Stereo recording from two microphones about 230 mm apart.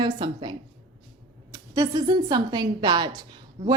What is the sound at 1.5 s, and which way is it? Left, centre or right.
A woman's voice, centre.